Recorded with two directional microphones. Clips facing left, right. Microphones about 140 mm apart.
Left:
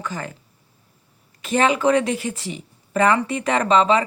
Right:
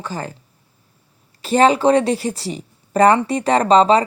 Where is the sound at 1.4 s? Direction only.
35° right (ahead or behind).